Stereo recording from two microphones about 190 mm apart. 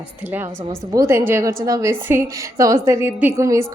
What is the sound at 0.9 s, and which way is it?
A woman's voice, 15° right (ahead or behind).